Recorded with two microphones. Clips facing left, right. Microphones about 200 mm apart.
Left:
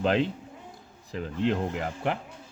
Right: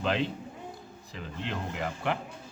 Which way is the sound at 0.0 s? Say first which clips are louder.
Left 4 dB; 45° left (ahead or behind).